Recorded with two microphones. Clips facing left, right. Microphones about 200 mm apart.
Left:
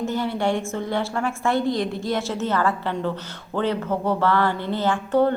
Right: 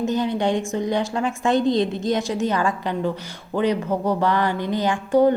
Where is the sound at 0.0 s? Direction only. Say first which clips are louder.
Right 2 dB; 20° right (ahead or behind).